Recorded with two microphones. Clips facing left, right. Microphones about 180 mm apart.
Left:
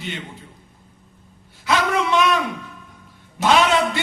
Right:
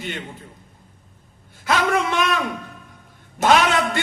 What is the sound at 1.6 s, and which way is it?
Speech, 50° right (ahead or behind).